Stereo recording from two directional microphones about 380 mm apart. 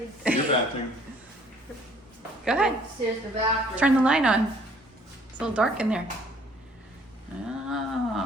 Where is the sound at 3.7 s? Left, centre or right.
Centre.